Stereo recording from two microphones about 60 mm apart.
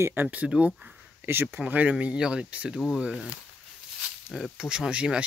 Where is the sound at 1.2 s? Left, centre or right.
Right.